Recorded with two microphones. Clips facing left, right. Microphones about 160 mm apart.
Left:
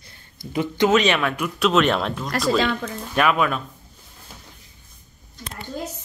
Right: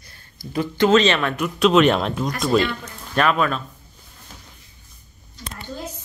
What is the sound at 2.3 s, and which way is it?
Speech, 85° left.